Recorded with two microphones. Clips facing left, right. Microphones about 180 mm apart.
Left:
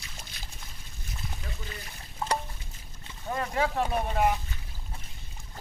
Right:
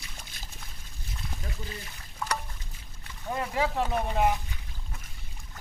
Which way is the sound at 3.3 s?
15° right (ahead or behind).